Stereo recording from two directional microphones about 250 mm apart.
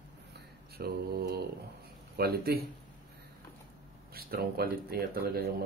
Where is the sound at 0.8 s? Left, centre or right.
Right.